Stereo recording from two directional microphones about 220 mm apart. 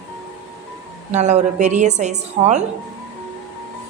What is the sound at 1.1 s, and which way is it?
A woman's voice, 30° right (ahead or behind).